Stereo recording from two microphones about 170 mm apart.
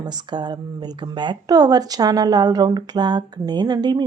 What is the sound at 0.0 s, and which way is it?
Speech, 25° right (ahead or behind).